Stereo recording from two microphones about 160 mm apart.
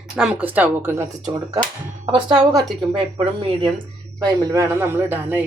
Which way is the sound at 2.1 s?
30° right (ahead or behind).